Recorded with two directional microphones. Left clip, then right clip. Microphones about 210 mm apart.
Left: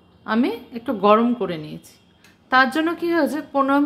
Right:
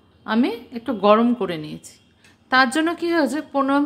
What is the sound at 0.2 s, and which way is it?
A woman's voice, 10° right (ahead or behind).